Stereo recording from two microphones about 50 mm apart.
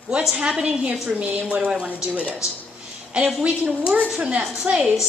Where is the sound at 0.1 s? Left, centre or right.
Right.